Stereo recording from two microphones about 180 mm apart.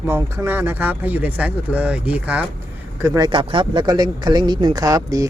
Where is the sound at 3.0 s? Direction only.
20° right (ahead or behind).